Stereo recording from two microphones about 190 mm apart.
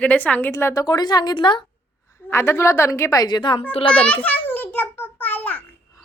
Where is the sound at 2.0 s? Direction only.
15° left (ahead or behind).